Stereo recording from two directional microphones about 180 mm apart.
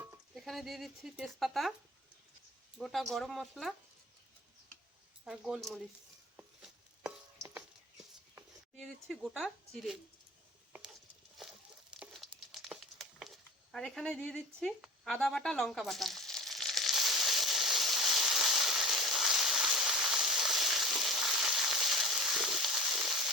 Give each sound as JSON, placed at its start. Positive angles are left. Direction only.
{"t": 0.3, "sound": "speech", "side_deg": 0}
{"t": 2.7, "sound": "speech", "side_deg": 0}
{"t": 5.2, "sound": "speech", "side_deg": -5}
{"t": 6.3, "sound": "chopping", "side_deg": -5}
{"t": 7.5, "sound": "a sound", "side_deg": -10}
{"t": 8.7, "sound": "speech", "side_deg": 0}
{"t": 11.4, "sound": "crumpling", "side_deg": 0}